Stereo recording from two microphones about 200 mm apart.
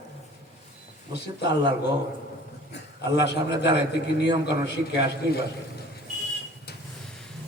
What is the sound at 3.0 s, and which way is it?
A man's voice, 60° left (ahead or behind).